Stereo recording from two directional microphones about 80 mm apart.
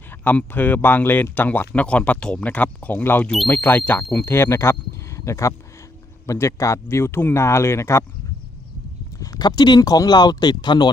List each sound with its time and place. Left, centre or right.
0.1 s speech: left
9.1 s speech: left